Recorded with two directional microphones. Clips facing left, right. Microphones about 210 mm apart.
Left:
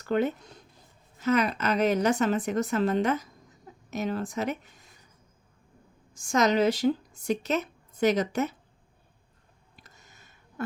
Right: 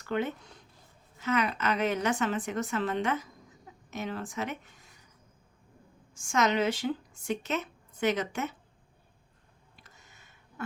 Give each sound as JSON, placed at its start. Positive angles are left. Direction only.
{"t": 0.0, "sound": "a woman's voice", "side_deg": 40}
{"t": 6.1, "sound": "speech", "side_deg": 35}
{"t": 9.8, "sound": "a sound", "side_deg": 40}